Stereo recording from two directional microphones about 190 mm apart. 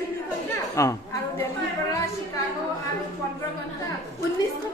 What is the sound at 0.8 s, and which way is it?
Speech, 15° left (ahead or behind).